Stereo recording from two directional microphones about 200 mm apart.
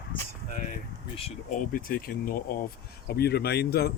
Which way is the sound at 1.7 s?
45° left (ahead or behind).